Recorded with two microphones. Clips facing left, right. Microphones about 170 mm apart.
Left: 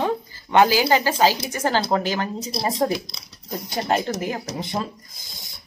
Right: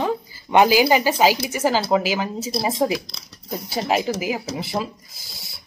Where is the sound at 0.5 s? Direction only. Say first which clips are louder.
Right 2 dB; 15° right (ahead or behind).